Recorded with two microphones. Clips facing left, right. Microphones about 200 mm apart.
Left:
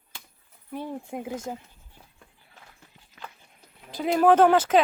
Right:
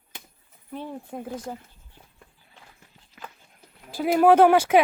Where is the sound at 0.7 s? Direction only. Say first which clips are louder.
Left 1 dB; 15° left (ahead or behind).